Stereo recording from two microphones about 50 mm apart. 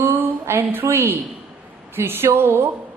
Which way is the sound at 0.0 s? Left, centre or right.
Right.